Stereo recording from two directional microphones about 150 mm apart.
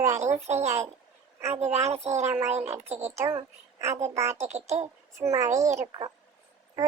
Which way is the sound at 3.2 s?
20° right (ahead or behind).